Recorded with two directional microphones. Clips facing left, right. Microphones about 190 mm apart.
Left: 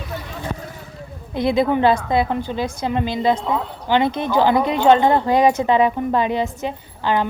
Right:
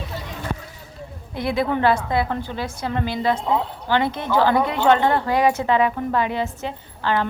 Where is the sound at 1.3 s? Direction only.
20° left (ahead or behind).